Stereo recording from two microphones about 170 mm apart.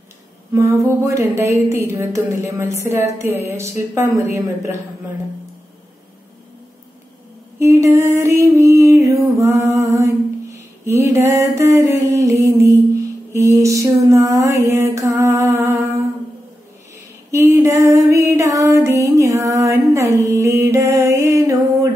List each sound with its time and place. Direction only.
0.5 s a sound: 15° right (ahead or behind)
1.3 s a woman's voice: 15° right (ahead or behind)
7.5 s music: 15° right (ahead or behind)
14.5 s mantra: 20° right (ahead or behind)
17.3 s music: 15° right (ahead or behind)